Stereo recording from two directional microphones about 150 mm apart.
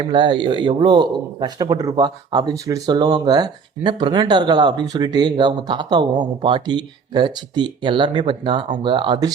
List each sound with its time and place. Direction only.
0.0 s a man's voice: 30° right (ahead or behind)